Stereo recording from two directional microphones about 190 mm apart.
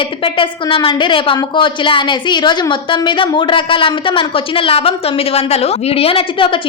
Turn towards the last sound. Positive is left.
turn(degrees=30)  # may be behind; listen again after turning